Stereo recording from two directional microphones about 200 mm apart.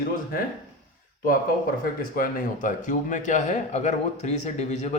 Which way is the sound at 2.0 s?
45° left (ahead or behind).